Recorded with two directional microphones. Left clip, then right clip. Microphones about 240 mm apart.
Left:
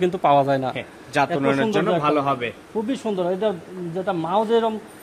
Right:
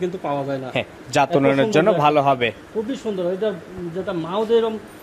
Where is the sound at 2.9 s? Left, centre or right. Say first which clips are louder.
Left 1 dB; left.